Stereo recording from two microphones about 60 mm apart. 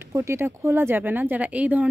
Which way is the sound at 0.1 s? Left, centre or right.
Right.